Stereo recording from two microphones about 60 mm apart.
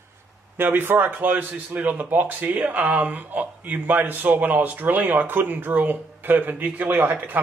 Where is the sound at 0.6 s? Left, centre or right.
Right.